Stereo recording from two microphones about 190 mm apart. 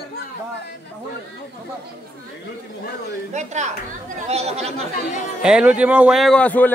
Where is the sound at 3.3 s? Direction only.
40° right (ahead or behind).